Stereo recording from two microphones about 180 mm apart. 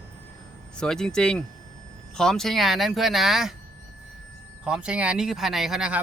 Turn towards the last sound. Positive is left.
turn(degrees=-5)  # may be behind; listen again after turning